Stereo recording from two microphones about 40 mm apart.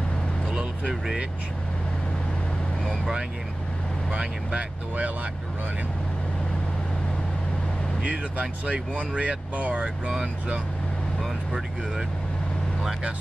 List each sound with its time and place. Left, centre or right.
0.5 s a sound: right
4.1 s speech: right
8.0 s speech: right